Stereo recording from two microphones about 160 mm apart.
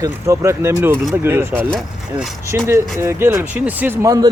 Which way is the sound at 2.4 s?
15° right (ahead or behind).